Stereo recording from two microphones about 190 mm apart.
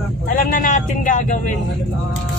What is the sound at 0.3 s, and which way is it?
Vehicle, 45° left (ahead or behind).